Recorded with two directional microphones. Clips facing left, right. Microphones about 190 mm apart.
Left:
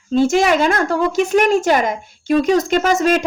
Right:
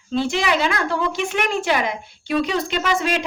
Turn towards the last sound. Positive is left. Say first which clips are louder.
# left 6 dB
turn(degrees=45)  # may be behind; listen again after turning